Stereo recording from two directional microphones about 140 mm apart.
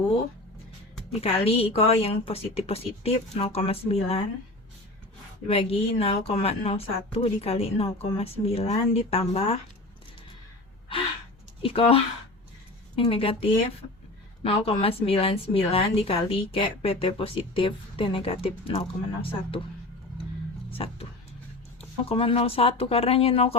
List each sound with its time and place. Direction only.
1.2 s speech: 45° left (ahead or behind)
5.5 s speech: 45° left (ahead or behind)
11.6 s speech: 45° left (ahead or behind)
20.7 s music: 40° left (ahead or behind)
22.1 s speech: 40° left (ahead or behind)